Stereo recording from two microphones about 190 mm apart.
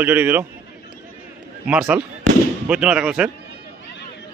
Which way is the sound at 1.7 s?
5° right (ahead or behind).